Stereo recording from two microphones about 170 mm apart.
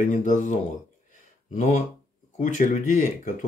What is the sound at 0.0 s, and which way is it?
Speech, 50° left (ahead or behind).